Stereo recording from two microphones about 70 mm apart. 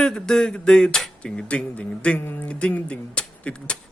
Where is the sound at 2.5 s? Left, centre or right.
Centre.